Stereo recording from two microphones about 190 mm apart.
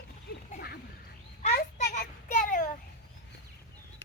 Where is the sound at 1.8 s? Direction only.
40° left (ahead or behind).